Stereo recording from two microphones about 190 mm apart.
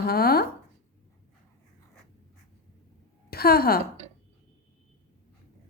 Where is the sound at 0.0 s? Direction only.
55° left (ahead or behind).